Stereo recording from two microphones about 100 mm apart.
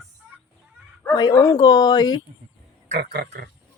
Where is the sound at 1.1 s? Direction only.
45° left (ahead or behind).